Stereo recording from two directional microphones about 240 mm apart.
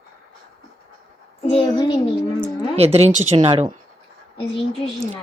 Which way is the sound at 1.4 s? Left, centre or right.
Left.